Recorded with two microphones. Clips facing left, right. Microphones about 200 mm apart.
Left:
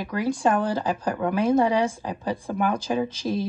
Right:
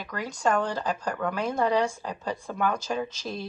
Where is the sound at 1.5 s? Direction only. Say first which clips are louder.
Left 4 dB; 10° left (ahead or behind).